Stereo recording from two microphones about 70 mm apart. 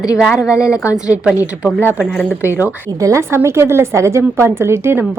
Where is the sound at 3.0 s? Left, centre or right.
Right.